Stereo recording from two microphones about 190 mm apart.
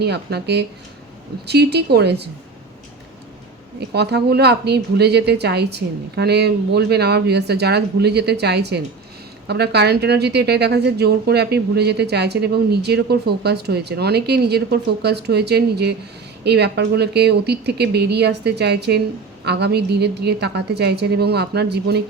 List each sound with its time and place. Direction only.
0.0 s a woman's voice: 60° right (ahead or behind)
3.8 s a woman's voice: 60° right (ahead or behind)